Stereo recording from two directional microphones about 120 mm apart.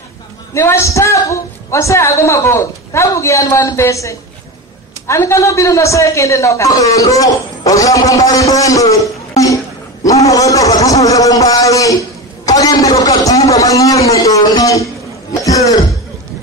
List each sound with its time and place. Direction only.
0.6 s a woman's voice: 25° left (ahead or behind)
15.4 s throat clearing: 30° left (ahead or behind)